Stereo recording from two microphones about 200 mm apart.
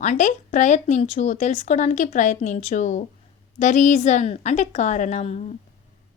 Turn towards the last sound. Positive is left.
turn(degrees=35)  # may be behind; listen again after turning